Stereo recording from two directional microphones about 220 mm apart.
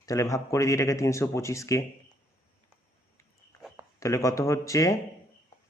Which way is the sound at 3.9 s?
15° left (ahead or behind).